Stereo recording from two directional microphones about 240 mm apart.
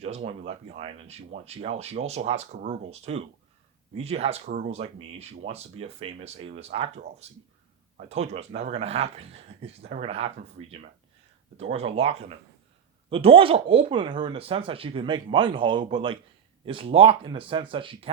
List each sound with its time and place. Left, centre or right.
0.0 s speech: right